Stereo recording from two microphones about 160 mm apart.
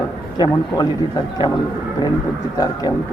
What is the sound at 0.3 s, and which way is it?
Speech, 25° left (ahead or behind).